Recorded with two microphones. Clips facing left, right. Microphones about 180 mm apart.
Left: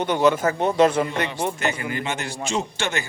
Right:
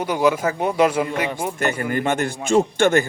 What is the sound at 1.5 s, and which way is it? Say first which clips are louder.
Speech: right 4 dB; 55° right (ahead or behind).